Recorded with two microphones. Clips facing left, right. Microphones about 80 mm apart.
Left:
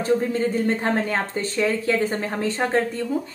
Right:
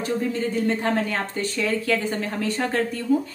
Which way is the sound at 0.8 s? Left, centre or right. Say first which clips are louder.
Left 1 dB; left.